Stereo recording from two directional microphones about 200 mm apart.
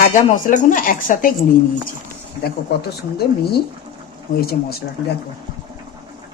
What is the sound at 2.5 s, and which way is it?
Speech, 50° left (ahead or behind).